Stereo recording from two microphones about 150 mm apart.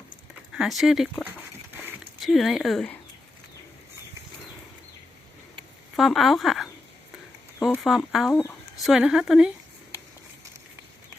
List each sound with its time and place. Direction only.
0.5 s speech: centre (ahead or behind)
2.2 s speech: centre (ahead or behind)
6.0 s speech: centre (ahead or behind)
7.8 s speech: centre (ahead or behind)
8.3 s speech: 15° left (ahead or behind)
8.8 s speech: 5° right (ahead or behind)